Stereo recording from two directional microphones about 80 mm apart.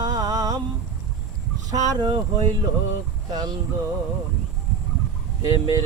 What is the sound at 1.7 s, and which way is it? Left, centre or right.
Speech, right.